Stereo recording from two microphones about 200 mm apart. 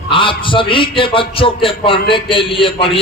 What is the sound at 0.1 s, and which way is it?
A man's voice, 25° left (ahead or behind).